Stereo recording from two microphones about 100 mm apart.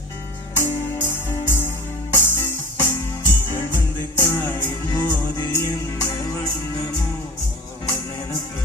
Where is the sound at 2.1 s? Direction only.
20° left (ahead or behind).